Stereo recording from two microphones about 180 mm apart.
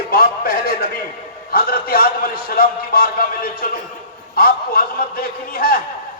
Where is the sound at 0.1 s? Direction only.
55° left (ahead or behind).